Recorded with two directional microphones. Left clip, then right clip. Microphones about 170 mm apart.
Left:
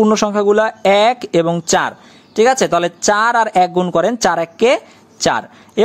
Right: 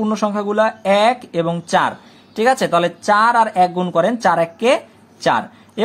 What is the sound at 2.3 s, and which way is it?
Speech, 30° left (ahead or behind).